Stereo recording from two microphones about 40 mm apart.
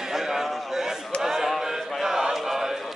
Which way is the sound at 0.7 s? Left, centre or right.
Centre.